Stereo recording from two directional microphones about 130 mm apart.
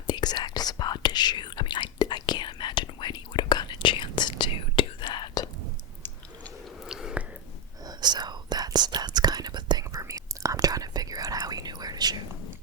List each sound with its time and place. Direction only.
0.1 s whispering: 30° left (ahead or behind)
6.8 s a sound: 5° right (ahead or behind)
7.9 s whispering: 35° right (ahead or behind)